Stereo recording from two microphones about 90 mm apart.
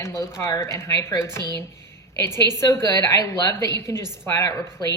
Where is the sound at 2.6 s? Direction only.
35° left (ahead or behind).